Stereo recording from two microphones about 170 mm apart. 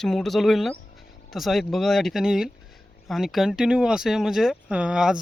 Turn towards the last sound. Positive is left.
turn(degrees=-5)  # may be behind; listen again after turning